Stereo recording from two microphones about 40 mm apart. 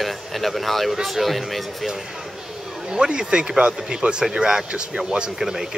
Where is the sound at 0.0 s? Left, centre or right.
Centre.